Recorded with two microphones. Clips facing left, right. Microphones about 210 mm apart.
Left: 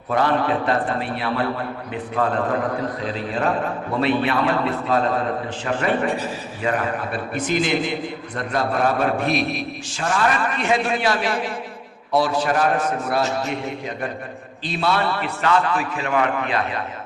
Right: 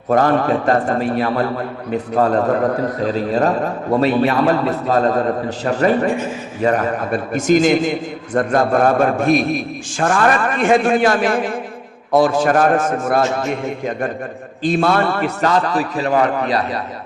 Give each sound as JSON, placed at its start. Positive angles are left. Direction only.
{"t": 0.1, "sound": "a man's voice", "side_deg": -45}
{"t": 14.6, "sound": "a man's voice", "side_deg": -50}